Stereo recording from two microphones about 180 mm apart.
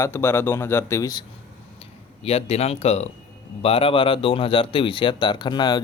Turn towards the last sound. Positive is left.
turn(degrees=25)  # may be behind; listen again after turning